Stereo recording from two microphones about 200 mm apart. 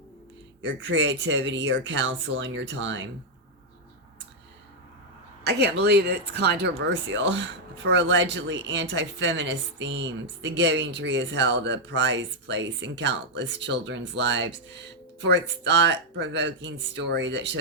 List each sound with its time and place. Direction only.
0.6 s speech: 65° right (ahead or behind)
5.4 s speech: 55° right (ahead or behind)